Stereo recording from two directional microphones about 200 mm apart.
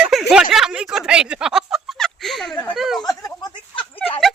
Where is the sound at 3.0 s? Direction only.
15° left (ahead or behind).